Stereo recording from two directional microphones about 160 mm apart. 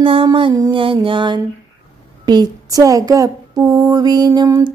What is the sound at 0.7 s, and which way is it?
Mantra, 35° right (ahead or behind).